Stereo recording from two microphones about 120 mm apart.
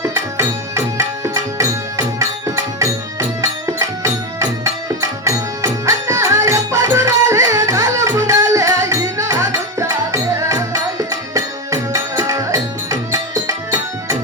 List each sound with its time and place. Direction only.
0.0 s music: 25° right (ahead or behind)